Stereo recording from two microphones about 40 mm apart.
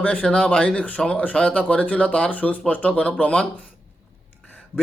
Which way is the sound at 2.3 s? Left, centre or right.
Left.